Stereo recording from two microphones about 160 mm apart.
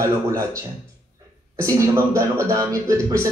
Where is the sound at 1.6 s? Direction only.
20° right (ahead or behind).